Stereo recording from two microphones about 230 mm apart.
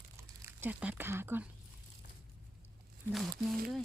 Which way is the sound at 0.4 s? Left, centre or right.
Centre.